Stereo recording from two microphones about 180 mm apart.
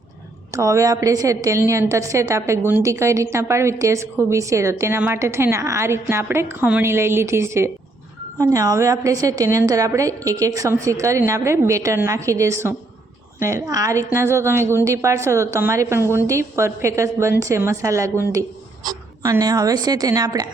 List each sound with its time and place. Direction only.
0.5 s a woman's voice: 15° right (ahead or behind)